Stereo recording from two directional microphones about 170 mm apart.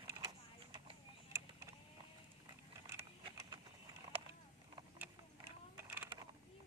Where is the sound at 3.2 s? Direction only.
30° right (ahead or behind).